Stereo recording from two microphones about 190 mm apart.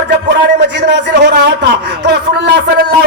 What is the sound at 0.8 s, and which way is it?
A man's voice, 65° right (ahead or behind).